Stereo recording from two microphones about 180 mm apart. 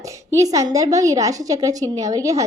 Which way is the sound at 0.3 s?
20° right (ahead or behind).